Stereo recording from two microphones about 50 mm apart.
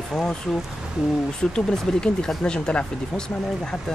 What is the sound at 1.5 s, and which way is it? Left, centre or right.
Speech, centre.